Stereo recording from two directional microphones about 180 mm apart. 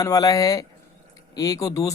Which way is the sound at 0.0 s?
20° left (ahead or behind).